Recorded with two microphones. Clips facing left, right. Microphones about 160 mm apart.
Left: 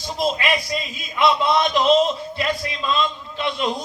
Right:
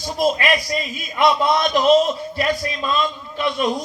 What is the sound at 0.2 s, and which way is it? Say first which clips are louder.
A man's voice: right 3 dB; 25° left (ahead or behind).